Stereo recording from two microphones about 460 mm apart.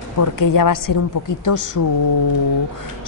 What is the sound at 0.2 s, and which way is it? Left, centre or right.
A woman's voice, left.